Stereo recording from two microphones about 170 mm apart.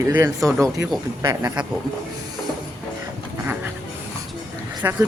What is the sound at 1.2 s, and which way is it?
Speech, 20° right (ahead or behind).